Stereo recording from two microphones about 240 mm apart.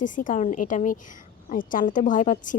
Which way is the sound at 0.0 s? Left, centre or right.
Left.